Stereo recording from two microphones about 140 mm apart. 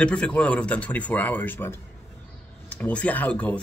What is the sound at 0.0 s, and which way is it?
Speech, 5° left (ahead or behind).